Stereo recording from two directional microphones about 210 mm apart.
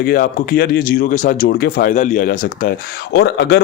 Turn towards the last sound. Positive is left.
turn(degrees=50)  # may be behind; listen again after turning